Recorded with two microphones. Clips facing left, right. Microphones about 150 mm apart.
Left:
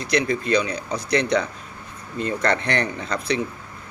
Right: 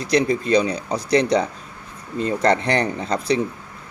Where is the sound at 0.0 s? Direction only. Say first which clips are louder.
Right 3 dB; 35° right (ahead or behind).